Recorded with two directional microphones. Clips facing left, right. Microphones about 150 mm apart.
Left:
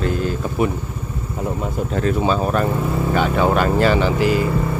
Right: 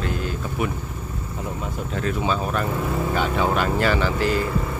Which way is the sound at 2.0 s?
40° left (ahead or behind).